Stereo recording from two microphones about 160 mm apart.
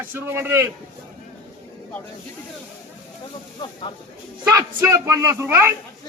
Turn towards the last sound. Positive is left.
turn(degrees=-15)  # may be behind; listen again after turning